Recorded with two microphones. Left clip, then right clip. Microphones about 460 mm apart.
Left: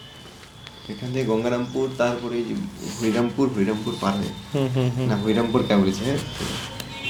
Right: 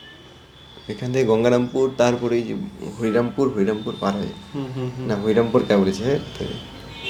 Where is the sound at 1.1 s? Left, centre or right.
Right.